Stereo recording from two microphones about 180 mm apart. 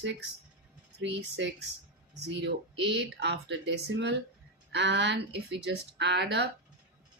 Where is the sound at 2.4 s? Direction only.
75° right (ahead or behind).